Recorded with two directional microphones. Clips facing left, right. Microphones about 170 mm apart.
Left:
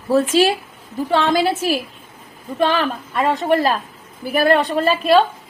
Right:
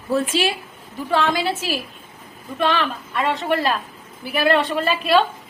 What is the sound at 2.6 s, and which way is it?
A woman's voice, 35° left (ahead or behind).